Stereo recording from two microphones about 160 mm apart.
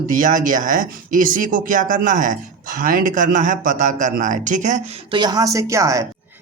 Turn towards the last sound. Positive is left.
turn(degrees=-20)  # may be behind; listen again after turning